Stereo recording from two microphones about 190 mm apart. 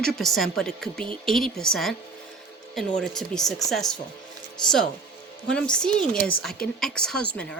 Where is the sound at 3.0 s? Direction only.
Centre (ahead or behind).